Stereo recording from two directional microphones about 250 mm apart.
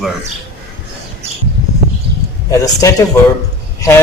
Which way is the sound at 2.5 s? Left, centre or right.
Centre.